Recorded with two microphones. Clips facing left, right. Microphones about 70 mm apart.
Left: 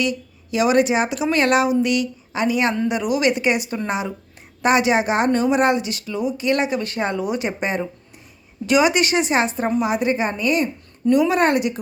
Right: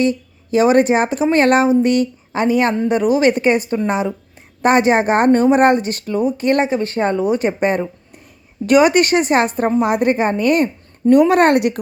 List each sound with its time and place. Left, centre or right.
0.0 s a woman's voice: right